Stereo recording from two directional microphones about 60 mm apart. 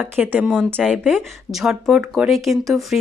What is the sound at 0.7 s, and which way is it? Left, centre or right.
Speech, centre.